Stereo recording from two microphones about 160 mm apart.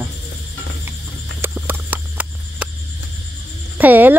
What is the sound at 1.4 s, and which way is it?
Clip-clop, 10° right (ahead or behind).